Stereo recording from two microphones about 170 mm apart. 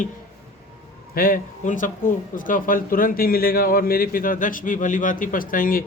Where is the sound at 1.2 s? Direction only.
55° left (ahead or behind).